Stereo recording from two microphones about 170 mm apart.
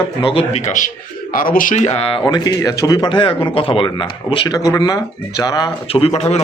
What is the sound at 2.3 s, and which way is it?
A man's voice, 25° left (ahead or behind).